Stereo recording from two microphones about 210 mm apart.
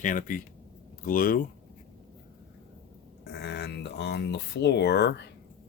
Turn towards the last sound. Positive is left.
turn(degrees=55)  # may be behind; listen again after turning